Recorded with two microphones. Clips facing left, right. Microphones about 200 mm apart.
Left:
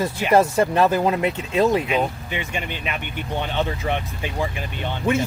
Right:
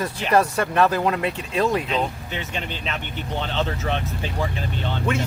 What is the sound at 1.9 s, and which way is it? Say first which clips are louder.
Speech: left 2 dB; 10° left (ahead or behind).